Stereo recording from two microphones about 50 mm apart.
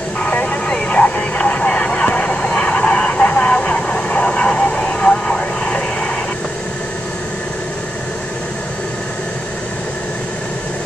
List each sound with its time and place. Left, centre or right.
0.2 s vehicle: left